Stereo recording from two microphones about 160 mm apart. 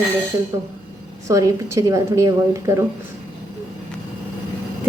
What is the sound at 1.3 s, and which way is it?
A woman's voice, 20° right (ahead or behind).